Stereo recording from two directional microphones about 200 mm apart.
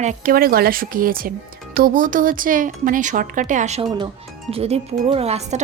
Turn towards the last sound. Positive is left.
turn(degrees=-35)  # may be behind; listen again after turning